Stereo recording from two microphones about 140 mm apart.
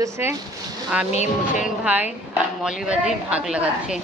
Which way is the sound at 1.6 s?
10° right (ahead or behind).